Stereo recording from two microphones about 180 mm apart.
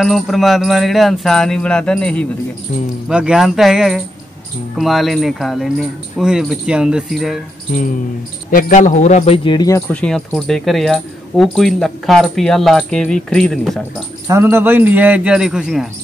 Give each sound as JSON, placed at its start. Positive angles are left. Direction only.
{"t": 0.0, "sound": "speech", "side_deg": 0}
{"t": 8.5, "sound": "speech", "side_deg": 45}
{"t": 9.9, "sound": "speech", "side_deg": 5}
{"t": 14.2, "sound": "a man's voice", "side_deg": -15}